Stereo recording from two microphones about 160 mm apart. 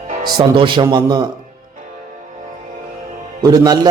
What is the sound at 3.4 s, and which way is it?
Speech, 25° right (ahead or behind).